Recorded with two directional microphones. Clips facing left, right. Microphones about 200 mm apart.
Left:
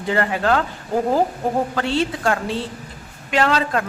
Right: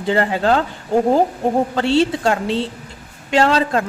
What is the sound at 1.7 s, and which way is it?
A woman's voice, 30° right (ahead or behind).